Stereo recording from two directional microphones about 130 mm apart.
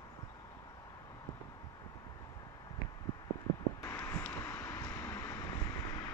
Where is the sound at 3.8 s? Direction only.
20° left (ahead or behind).